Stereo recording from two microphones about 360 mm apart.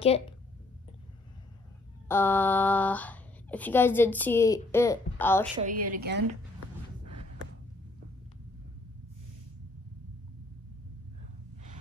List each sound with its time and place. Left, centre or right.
2.0 s speech: centre
5.6 s a woman's voice: right